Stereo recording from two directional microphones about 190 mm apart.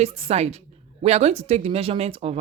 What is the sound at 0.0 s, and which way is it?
Speech, 35° right (ahead or behind).